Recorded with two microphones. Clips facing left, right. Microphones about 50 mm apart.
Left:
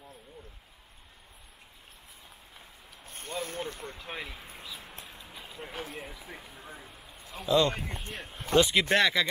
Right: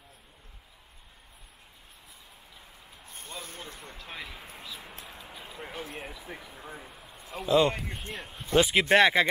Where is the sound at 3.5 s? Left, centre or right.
Left.